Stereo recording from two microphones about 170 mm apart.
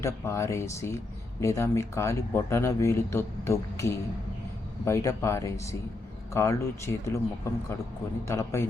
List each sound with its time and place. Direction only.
0.0 s speech: 15° left (ahead or behind)
8.3 s speech: 15° left (ahead or behind)